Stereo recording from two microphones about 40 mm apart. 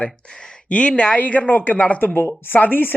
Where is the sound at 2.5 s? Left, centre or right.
Left.